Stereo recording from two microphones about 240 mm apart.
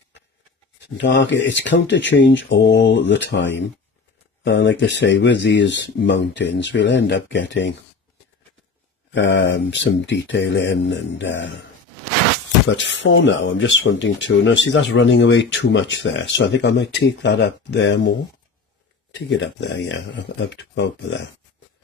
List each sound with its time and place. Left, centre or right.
0.7 s speech: left
9.1 s speech: left
12.7 s speech: left
19.1 s speech: left